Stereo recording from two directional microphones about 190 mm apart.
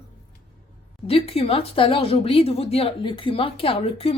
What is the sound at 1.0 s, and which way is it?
Speech, 30° left (ahead or behind).